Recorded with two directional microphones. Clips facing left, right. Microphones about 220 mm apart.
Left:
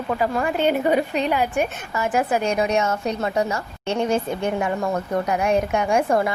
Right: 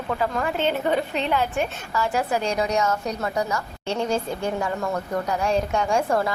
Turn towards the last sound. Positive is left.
turn(degrees=20)  # may be behind; listen again after turning